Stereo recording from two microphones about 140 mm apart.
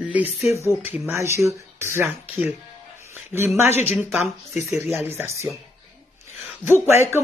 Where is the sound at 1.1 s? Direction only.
20° right (ahead or behind).